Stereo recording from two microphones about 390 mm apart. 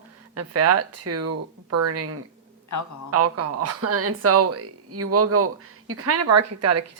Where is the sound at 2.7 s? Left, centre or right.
Left.